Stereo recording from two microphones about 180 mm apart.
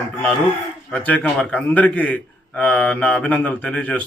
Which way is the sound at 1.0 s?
10° left (ahead or behind).